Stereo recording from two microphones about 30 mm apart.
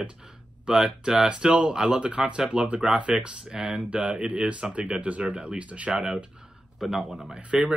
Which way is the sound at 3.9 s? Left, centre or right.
Right.